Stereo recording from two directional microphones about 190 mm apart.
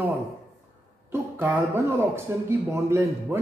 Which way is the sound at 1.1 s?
10° right (ahead or behind).